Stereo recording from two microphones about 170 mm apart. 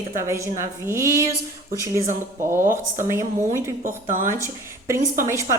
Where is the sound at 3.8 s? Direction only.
50° right (ahead or behind).